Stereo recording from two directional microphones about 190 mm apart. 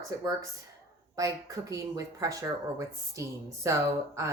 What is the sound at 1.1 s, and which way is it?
Speech, 20° right (ahead or behind).